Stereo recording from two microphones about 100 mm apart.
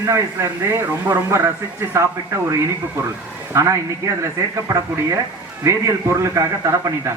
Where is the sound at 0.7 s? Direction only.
25° right (ahead or behind).